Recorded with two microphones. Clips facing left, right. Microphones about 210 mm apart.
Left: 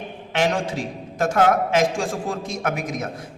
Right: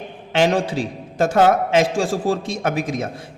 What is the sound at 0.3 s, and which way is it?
A man's voice, 30° right (ahead or behind).